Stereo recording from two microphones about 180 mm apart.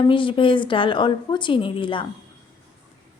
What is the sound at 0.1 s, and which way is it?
A woman's voice, 30° left (ahead or behind).